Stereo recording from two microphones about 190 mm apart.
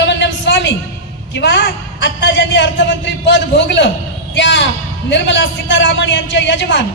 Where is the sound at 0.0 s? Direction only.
70° left (ahead or behind).